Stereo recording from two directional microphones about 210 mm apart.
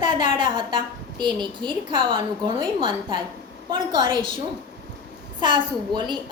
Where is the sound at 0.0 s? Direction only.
20° right (ahead or behind).